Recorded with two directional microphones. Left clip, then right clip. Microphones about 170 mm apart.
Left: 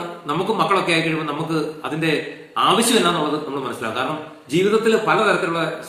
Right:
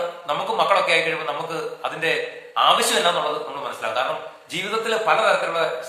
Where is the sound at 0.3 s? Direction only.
10° right (ahead or behind).